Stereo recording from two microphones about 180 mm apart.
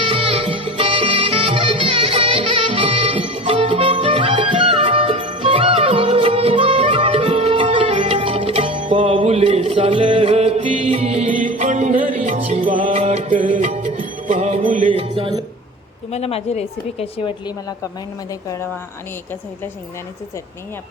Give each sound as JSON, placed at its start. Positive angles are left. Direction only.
{"t": 0.0, "sound": "music", "side_deg": -30}
{"t": 16.1, "sound": "a woman's voice", "side_deg": 35}